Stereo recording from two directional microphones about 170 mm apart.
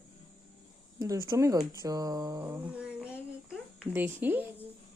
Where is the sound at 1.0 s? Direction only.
20° right (ahead or behind).